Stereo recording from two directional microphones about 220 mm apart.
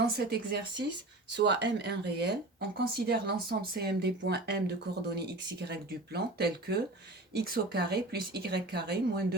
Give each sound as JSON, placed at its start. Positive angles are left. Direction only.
{"t": 0.2, "sound": "speech", "side_deg": -50}